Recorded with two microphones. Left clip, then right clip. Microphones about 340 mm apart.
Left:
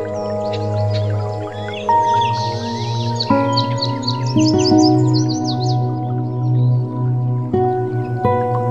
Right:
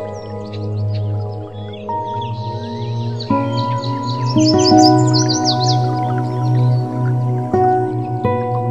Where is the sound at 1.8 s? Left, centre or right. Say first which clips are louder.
Left 8 dB; left.